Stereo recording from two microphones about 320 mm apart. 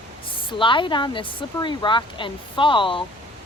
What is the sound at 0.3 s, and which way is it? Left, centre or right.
Speech, centre.